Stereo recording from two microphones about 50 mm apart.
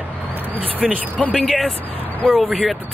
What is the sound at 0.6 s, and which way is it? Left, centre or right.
Speech, right.